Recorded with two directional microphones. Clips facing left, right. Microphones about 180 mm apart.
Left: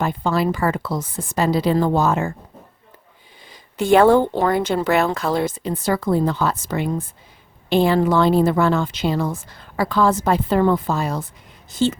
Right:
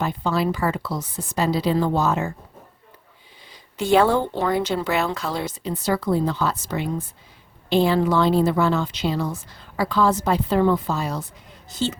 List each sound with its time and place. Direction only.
0.0 s a woman's voice: 50° left (ahead or behind)
3.5 s a woman's voice: 50° left (ahead or behind)